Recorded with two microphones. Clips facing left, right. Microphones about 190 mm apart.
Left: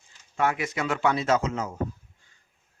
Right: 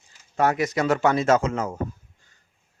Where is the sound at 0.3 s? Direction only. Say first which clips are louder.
Right 5 dB; 40° right (ahead or behind).